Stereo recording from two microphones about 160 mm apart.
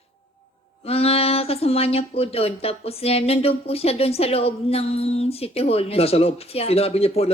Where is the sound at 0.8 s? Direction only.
40° left (ahead or behind).